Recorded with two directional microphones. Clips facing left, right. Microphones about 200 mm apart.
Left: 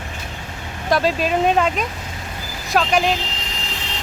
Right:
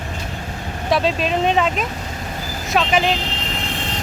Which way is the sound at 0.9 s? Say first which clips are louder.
Even; centre (ahead or behind).